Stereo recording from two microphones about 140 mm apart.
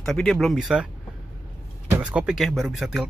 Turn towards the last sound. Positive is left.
turn(degrees=0)  # may be behind; listen again after turning